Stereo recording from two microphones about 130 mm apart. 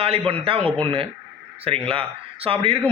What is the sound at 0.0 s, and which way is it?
A man's voice, 50° right (ahead or behind).